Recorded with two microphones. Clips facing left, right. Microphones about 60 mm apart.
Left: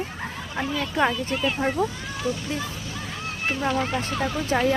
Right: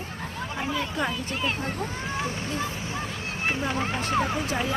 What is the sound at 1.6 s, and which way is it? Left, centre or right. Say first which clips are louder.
Speech: left 7 dB; left.